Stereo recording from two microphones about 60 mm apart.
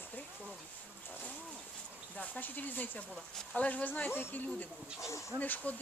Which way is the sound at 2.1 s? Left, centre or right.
Left.